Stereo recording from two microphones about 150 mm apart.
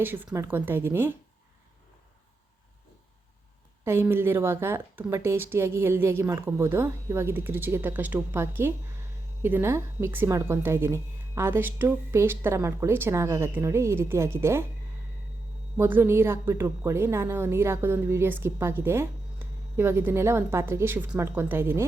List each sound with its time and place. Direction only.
0.0 s a woman's voice: 15° right (ahead or behind)
3.8 s a woman's voice: 15° right (ahead or behind)
15.8 s a woman's voice: 15° right (ahead or behind)